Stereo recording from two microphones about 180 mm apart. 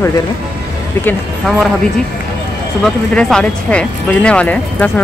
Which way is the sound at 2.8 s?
5° left (ahead or behind).